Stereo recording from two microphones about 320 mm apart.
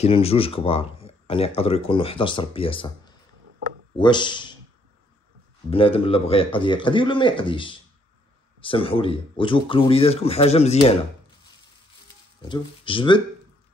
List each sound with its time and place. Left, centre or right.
0.0 s speech: centre
5.7 s speech: centre
12.4 s speech: centre